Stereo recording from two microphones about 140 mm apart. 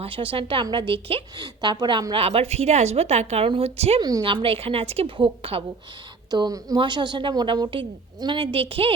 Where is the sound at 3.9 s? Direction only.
30° right (ahead or behind).